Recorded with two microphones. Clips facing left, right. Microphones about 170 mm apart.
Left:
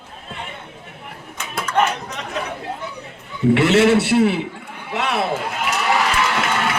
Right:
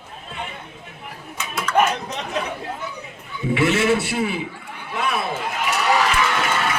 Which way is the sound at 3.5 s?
65° left (ahead or behind).